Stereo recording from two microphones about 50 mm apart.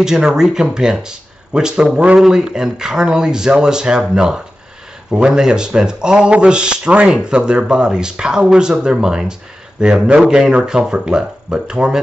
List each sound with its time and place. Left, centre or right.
0.0 s speech: centre
2.1 s speech: centre